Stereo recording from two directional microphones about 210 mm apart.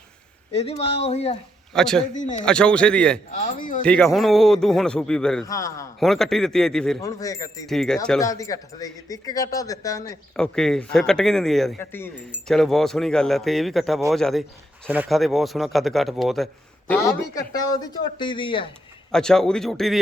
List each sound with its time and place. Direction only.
0.5 s a man's voice: 30° left (ahead or behind)
1.7 s speech: 5° left (ahead or behind)
2.1 s speech: 35° left (ahead or behind)
2.4 s speech: 5° left (ahead or behind)
3.4 s speech: 40° left (ahead or behind)
3.8 s speech: 5° left (ahead or behind)
5.5 s speech: 15° left (ahead or behind)
6.0 s speech: centre (ahead or behind)
7.0 s speech: 15° left (ahead or behind)
7.7 s speech: centre (ahead or behind)
8.2 s speech: 15° left (ahead or behind)
10.3 s speech: 5° left (ahead or behind)
16.9 s a man's voice: 15° left (ahead or behind)
19.1 s speech: 5° left (ahead or behind)